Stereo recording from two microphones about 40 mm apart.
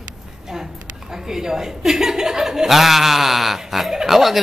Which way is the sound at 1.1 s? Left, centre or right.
Centre.